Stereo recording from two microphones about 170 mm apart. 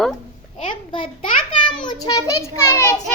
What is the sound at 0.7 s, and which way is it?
Speech, 30° left (ahead or behind).